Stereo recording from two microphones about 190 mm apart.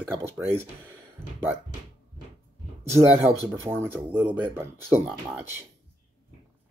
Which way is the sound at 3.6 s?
10° right (ahead or behind).